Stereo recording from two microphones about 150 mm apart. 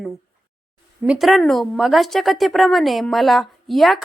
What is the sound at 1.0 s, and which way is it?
A woman's voice, 5° right (ahead or behind).